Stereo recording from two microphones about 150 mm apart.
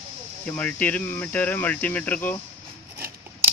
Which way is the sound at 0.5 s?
10° left (ahead or behind).